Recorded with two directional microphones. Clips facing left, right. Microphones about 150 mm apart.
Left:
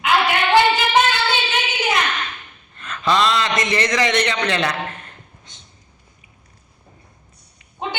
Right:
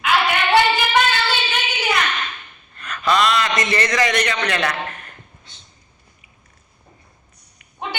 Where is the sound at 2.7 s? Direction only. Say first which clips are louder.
Even; 25° left (ahead or behind).